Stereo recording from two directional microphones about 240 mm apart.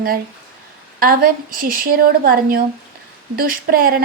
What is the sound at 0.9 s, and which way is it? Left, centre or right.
Speech, right.